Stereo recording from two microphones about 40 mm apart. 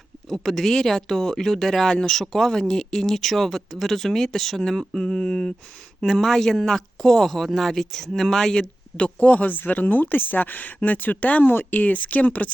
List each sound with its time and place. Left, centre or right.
0.3 s speech: centre
9.2 s speech: left